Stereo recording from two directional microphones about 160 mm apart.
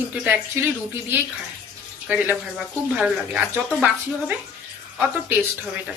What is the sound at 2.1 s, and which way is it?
A woman's voice, 10° right (ahead or behind).